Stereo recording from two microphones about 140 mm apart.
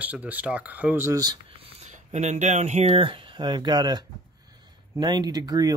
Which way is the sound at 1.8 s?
55° right (ahead or behind).